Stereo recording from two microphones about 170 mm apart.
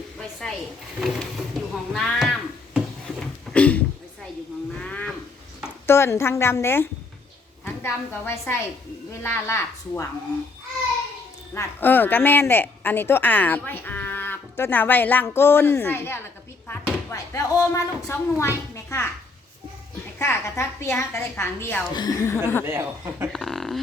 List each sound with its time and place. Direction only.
0.2 s speech: 5° left (ahead or behind)
1.7 s a sound: centre (ahead or behind)
4.8 s wild animals: 5° left (ahead or behind)
5.8 s a woman's voice: 15° left (ahead or behind)
11.5 s a woman's voice: 10° left (ahead or behind)
20.1 s a woman's voice: 15° left (ahead or behind)
21.9 s a woman's voice: 20° left (ahead or behind)
22.6 s speech: 15° right (ahead or behind)
23.3 s speech: centre (ahead or behind)